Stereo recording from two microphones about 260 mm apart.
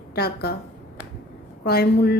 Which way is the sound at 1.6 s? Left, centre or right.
Left.